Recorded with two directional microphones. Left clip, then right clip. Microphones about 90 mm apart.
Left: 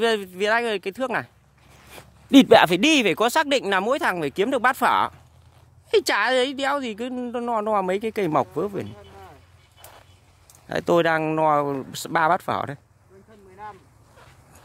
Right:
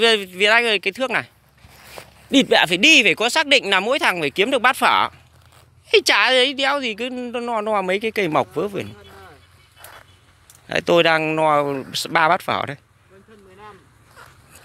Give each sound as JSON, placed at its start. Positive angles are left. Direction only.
{"t": 0.0, "sound": "a woman's voice", "side_deg": 20}
{"t": 2.0, "sound": "a sound", "side_deg": -65}
{"t": 2.3, "sound": "speech", "side_deg": 90}
{"t": 3.4, "sound": "a woman's voice", "side_deg": 40}
{"t": 10.7, "sound": "a woman's voice", "side_deg": 30}